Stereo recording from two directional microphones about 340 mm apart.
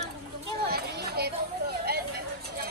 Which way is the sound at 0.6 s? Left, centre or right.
Right.